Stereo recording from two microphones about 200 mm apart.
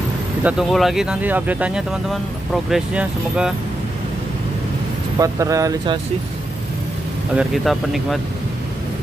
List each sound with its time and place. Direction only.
0.4 s speech: 5° right (ahead or behind)
5.2 s speech: 15° right (ahead or behind)
7.3 s speech: centre (ahead or behind)